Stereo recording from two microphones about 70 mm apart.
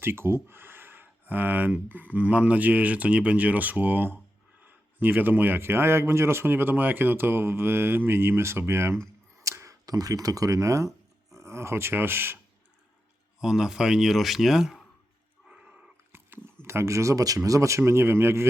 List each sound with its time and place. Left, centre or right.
0.0 s speech: right
9.4 s speech: right
13.4 s speech: centre
15.4 s a sound: centre
16.1 s dog: right
16.6 s speech: right